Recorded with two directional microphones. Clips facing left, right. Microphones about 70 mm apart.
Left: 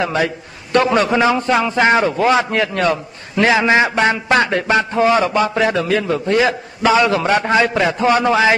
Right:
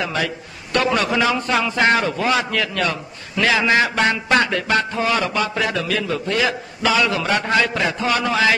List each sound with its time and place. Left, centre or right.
0.0 s a man's voice: left